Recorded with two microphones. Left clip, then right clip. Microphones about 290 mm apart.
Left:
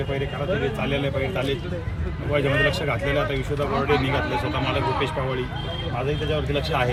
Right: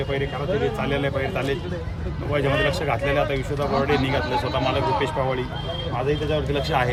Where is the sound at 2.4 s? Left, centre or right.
Centre.